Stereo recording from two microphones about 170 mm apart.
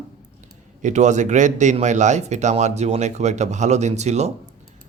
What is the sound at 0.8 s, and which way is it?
Speech, 45° right (ahead or behind).